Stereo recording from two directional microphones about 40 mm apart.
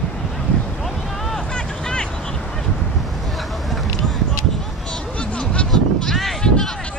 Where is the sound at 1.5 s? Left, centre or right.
Left.